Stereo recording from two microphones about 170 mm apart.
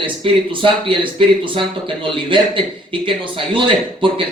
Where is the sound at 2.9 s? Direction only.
30° right (ahead or behind).